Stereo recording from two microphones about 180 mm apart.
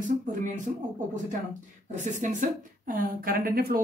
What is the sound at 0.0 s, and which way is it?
Speech, 45° right (ahead or behind).